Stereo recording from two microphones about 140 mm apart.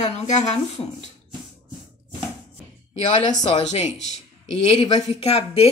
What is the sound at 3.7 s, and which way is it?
A woman's voice, 55° left (ahead or behind).